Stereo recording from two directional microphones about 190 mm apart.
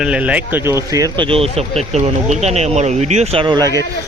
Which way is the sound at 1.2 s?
30° right (ahead or behind).